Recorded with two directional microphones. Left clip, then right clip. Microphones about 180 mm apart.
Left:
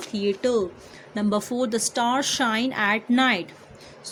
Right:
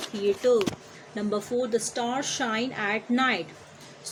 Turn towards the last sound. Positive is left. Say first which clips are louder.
# left 4 dB
turn(degrees=50)  # may be behind; listen again after turning